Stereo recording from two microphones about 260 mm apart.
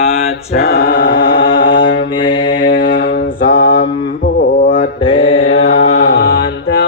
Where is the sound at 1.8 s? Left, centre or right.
Left.